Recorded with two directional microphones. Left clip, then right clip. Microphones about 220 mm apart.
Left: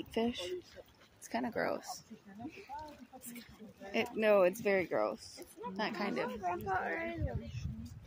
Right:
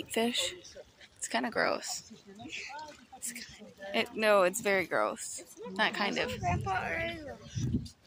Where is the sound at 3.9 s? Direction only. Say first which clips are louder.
Right 3 dB; 5° left (ahead or behind).